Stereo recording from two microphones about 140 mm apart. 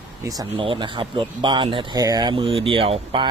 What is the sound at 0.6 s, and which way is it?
Speech, 35° right (ahead or behind).